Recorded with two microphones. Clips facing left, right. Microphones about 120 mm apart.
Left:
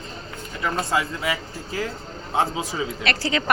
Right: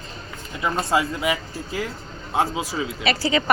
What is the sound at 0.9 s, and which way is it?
Speech, 20° right (ahead or behind).